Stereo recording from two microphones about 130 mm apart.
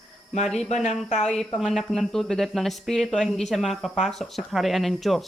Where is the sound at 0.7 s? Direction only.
60° left (ahead or behind).